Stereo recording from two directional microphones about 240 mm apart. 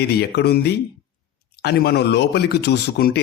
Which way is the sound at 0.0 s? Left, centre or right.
Left.